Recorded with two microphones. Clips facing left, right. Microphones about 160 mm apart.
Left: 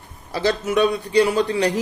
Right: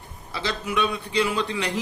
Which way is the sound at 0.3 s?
45° left (ahead or behind).